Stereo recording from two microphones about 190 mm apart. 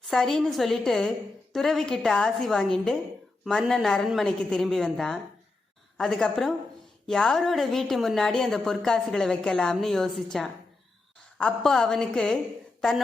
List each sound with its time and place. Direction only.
0.0 s a woman's voice: centre (ahead or behind)